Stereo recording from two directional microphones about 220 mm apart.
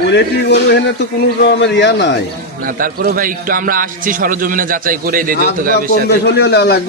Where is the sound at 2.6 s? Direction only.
40° right (ahead or behind).